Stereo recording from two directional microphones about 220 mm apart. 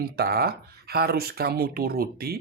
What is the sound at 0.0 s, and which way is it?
Speech, 45° right (ahead or behind).